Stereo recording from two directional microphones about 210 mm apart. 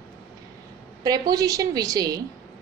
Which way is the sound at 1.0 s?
20° right (ahead or behind).